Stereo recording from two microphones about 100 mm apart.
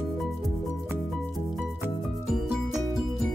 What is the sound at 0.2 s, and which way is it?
Music, 5° left (ahead or behind).